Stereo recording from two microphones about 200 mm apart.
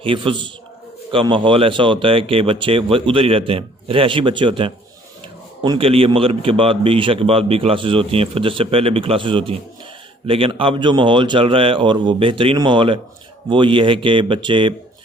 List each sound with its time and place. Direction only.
0.0 s a man's voice: 25° right (ahead or behind)